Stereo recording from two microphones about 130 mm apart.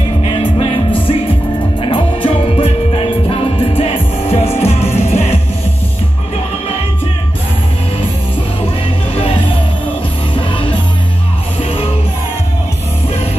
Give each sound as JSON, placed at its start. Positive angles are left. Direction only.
{"t": 0.2, "sound": "music", "side_deg": 40}
{"t": 9.1, "sound": "music", "side_deg": 50}